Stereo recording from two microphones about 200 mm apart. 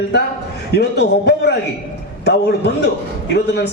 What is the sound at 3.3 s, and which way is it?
Speech, 55° left (ahead or behind).